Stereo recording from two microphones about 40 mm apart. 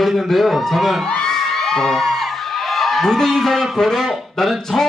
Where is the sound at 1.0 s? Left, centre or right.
Left.